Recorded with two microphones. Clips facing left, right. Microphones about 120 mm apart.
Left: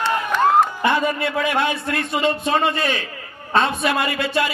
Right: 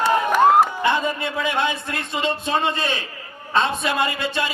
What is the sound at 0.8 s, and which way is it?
A man's voice, 25° right (ahead or behind).